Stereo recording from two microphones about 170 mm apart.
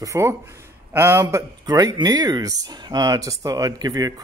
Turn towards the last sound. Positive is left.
turn(degrees=-20)  # may be behind; listen again after turning